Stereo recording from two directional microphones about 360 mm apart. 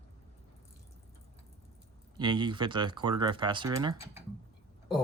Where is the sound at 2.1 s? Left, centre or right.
Centre.